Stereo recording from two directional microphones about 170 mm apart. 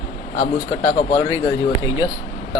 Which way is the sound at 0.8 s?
40° left (ahead or behind).